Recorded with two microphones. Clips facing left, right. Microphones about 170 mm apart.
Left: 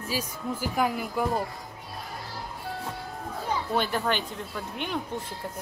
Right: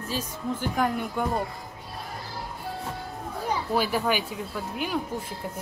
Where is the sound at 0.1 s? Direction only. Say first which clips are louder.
Right 1 dB; 5° left (ahead or behind).